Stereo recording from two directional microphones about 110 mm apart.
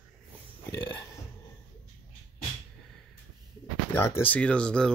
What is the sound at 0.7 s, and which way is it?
Speech, 35° left (ahead or behind).